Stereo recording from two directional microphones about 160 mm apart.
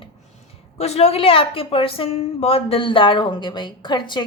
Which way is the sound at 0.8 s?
40° left (ahead or behind).